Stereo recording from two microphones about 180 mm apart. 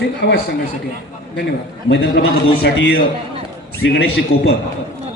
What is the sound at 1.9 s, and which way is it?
Speech, 75° left (ahead or behind).